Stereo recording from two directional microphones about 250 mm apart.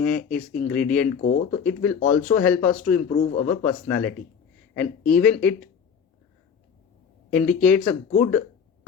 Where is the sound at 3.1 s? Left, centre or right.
Left.